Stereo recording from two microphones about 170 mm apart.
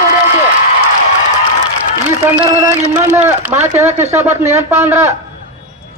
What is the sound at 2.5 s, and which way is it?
Speech, 10° right (ahead or behind).